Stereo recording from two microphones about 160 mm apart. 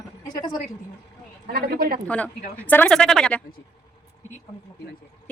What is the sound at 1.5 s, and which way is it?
Speech, 70° right (ahead or behind).